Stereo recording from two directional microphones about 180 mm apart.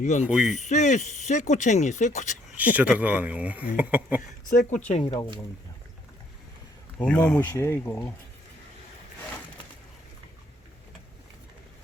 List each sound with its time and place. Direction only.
0.0 s speech: 40° left (ahead or behind)
0.3 s speech: 5° right (ahead or behind)
0.5 s speech: 40° left (ahead or behind)
2.6 s speech: 10° right (ahead or behind)
4.4 s speech: 45° left (ahead or behind)
4.9 s speech: 35° left (ahead or behind)
7.0 s speech: 5° left (ahead or behind)